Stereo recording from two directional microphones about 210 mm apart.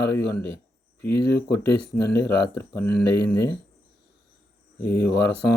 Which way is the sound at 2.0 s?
50° left (ahead or behind).